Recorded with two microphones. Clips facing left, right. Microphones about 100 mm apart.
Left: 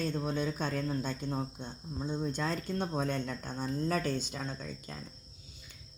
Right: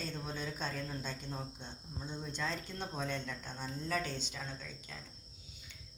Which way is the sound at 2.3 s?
45° left (ahead or behind).